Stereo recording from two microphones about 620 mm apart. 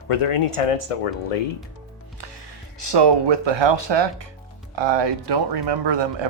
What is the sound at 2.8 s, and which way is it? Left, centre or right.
Speech, right.